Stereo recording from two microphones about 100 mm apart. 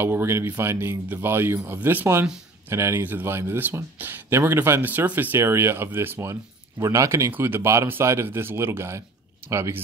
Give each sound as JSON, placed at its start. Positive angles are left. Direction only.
{"t": 0.0, "sound": "speech", "side_deg": -25}